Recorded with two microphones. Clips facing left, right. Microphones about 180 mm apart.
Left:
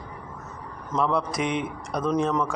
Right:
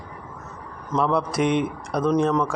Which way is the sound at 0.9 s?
Centre (ahead or behind).